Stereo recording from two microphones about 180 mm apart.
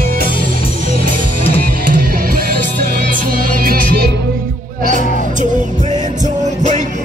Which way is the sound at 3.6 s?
55° right (ahead or behind).